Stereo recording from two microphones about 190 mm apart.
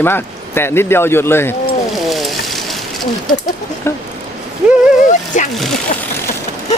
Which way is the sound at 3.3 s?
20° left (ahead or behind).